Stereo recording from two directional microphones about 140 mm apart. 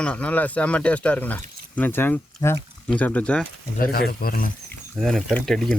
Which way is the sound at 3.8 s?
90° left.